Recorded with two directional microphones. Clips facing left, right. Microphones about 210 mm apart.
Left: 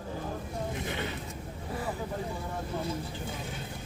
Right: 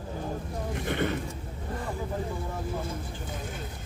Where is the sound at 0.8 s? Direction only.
55° right (ahead or behind).